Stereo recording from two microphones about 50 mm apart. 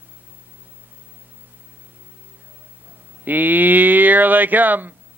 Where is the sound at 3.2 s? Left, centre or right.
Right.